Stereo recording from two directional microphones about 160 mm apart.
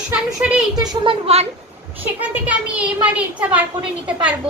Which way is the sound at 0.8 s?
30° right (ahead or behind).